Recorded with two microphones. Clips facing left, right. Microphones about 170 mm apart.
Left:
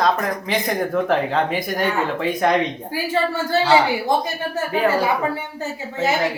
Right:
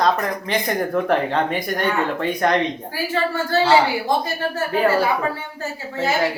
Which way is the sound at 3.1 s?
15° left (ahead or behind).